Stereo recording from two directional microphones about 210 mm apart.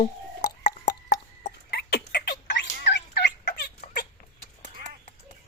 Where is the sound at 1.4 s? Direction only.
50° left (ahead or behind).